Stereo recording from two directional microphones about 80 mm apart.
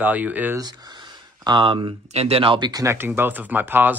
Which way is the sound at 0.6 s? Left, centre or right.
Right.